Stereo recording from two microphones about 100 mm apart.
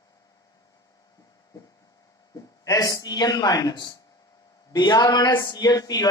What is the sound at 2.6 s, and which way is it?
Speech, 35° left (ahead or behind).